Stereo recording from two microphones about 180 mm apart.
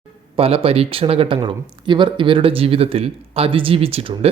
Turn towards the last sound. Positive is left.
turn(degrees=-30)  # may be behind; listen again after turning